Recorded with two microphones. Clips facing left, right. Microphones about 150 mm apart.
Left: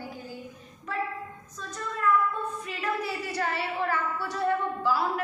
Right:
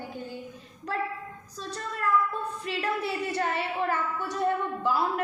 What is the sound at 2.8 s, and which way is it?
A woman's voice, 25° right (ahead or behind).